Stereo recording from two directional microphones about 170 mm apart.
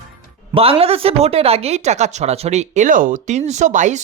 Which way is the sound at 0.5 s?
35° right (ahead or behind).